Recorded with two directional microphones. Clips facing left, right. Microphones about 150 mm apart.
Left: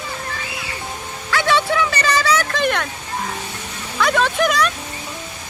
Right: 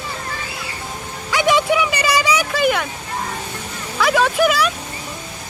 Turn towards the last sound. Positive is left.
turn(degrees=-5)  # may be behind; listen again after turning